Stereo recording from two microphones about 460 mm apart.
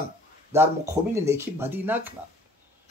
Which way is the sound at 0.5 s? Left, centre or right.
Centre.